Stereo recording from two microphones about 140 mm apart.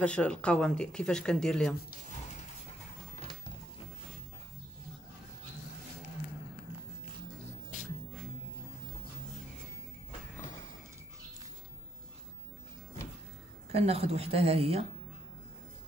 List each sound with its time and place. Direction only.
0.0 s speech: 10° left (ahead or behind)
13.7 s a woman's voice: 45° right (ahead or behind)